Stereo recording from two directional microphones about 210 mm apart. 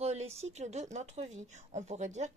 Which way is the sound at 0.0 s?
30° right (ahead or behind).